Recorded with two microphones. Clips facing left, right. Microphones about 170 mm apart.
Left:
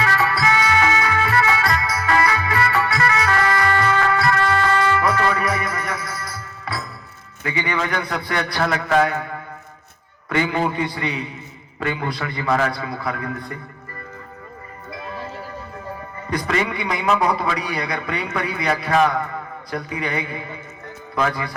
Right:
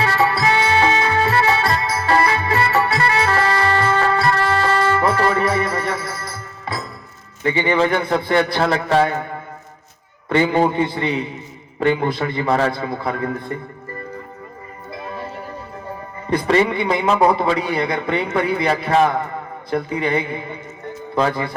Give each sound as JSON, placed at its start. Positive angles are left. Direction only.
{"t": 0.0, "sound": "music", "side_deg": -30}
{"t": 7.4, "sound": "a man's voice", "side_deg": -25}
{"t": 16.3, "sound": "a man's voice", "side_deg": -30}